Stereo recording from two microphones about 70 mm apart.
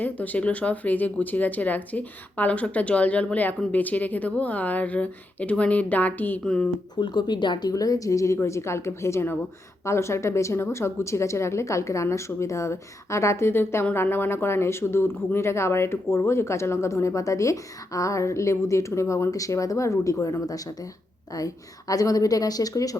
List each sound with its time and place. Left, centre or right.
0.0 s speech: left
6.4 s speech: centre
6.9 s a woman's voice: left